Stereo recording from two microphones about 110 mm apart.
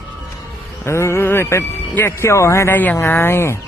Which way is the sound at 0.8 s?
25° left (ahead or behind).